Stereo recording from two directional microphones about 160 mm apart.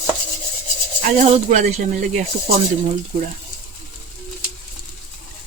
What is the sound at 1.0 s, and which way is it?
Speech, 45° right (ahead or behind).